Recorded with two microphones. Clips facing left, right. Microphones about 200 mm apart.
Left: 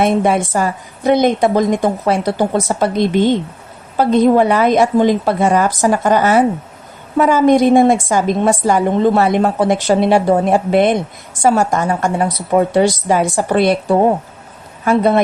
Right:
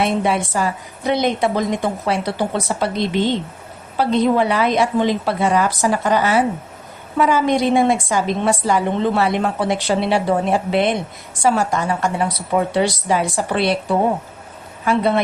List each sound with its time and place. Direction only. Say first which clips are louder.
0.0 s a woman's voice: left 5 dB; 45° left (ahead or behind)